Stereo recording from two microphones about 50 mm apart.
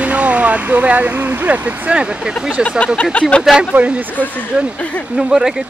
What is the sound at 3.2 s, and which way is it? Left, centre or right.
Speech, left.